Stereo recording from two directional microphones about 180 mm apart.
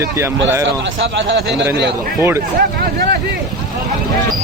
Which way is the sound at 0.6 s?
85° right.